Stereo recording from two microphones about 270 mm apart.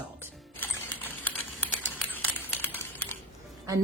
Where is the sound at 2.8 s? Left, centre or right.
Centre.